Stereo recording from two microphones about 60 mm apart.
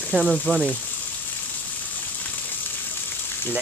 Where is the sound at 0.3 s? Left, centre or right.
Centre.